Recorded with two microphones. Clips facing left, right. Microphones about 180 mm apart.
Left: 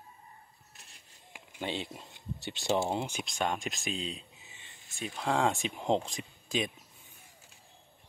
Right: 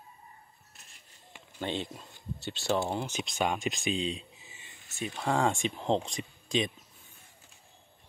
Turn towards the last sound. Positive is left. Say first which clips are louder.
# right 3 dB
turn(degrees=5)  # may be behind; listen again after turning